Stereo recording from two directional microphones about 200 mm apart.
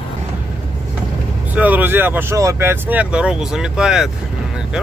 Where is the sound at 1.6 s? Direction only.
10° right (ahead or behind).